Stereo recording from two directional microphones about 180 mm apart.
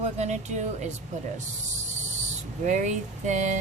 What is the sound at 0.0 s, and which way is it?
Speech, 40° right (ahead or behind).